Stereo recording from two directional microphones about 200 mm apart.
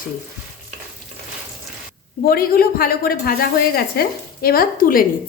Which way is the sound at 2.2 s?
45° left (ahead or behind).